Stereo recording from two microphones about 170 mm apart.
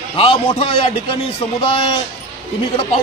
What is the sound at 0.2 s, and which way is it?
Speech, 35° left (ahead or behind).